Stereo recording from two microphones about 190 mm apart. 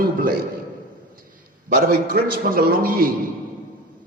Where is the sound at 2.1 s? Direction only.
50° right (ahead or behind).